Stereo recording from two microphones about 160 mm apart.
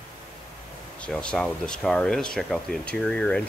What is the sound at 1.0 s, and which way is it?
Speech, 5° left (ahead or behind).